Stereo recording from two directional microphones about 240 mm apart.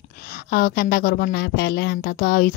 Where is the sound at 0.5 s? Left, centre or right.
Left.